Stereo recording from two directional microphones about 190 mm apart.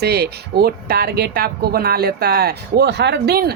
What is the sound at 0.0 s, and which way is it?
Speech, 55° right (ahead or behind).